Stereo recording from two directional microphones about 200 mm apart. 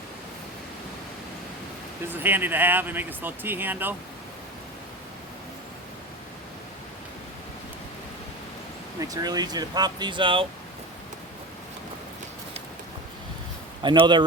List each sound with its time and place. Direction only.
2.2 s speech: 10° right (ahead or behind)
9.0 s speech: 15° right (ahead or behind)
13.8 s speech: 25° right (ahead or behind)